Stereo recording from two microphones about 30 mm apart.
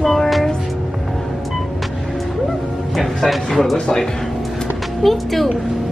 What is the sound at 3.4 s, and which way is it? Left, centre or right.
Speech, centre.